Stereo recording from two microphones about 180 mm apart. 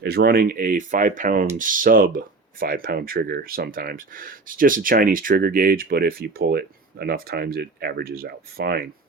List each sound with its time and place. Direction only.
0.0 s speech: 60° right (ahead or behind)